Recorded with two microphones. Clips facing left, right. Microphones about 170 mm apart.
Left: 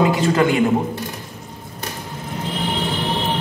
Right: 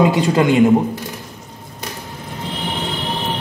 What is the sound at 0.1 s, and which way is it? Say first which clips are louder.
Speech: right 1 dB; 20° right (ahead or behind).